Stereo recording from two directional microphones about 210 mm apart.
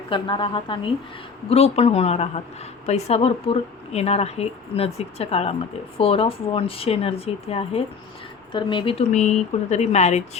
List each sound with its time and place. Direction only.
0.1 s speech: 25° left (ahead or behind)